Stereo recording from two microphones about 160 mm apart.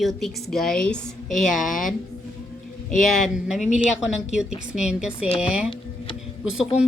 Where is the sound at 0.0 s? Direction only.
Centre (ahead or behind).